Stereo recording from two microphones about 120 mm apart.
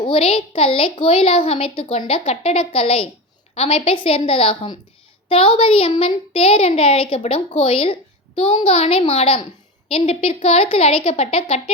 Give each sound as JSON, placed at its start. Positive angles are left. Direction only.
{"t": 0.0, "sound": "a woman's voice", "side_deg": 50}